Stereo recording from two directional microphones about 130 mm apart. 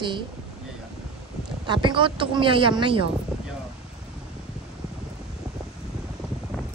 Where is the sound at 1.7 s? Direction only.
35° right (ahead or behind).